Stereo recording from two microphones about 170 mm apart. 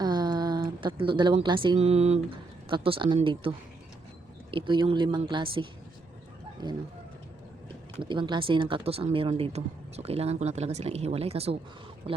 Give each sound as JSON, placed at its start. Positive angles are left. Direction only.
{"t": 0.0, "sound": "a woman's voice", "side_deg": -25}
{"t": 4.5, "sound": "speech", "side_deg": -30}
{"t": 8.0, "sound": "speech", "side_deg": -30}